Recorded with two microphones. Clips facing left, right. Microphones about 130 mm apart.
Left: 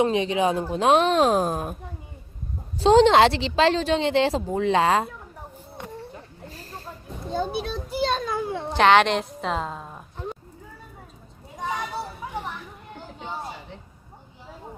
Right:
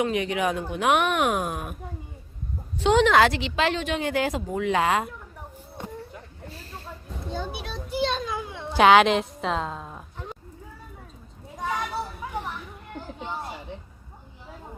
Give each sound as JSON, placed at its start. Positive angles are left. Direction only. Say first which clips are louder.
{"t": 0.0, "sound": "a woman's voice", "louder": "left 3 dB", "side_deg": 25}
{"t": 2.7, "sound": "a woman's voice", "louder": "left 4 dB", "side_deg": 35}
{"t": 6.5, "sound": "snake", "louder": "left 1 dB", "side_deg": 40}
{"t": 7.3, "sound": "children playing", "louder": "left 7 dB", "side_deg": 45}
{"t": 8.7, "sound": "a woman's voice", "louder": "right 1 dB", "side_deg": -5}